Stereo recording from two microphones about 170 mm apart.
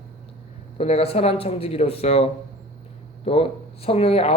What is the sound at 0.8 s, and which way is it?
A man's voice, 35° left (ahead or behind).